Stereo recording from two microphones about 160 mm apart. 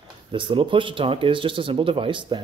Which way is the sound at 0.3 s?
30° right (ahead or behind).